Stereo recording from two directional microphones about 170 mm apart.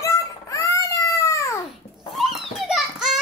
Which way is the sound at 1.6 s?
Centre (ahead or behind).